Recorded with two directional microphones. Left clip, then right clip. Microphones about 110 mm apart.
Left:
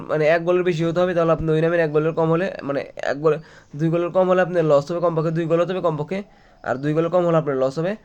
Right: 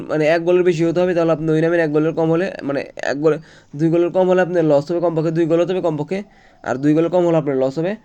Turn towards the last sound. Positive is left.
turn(degrees=-25)  # may be behind; listen again after turning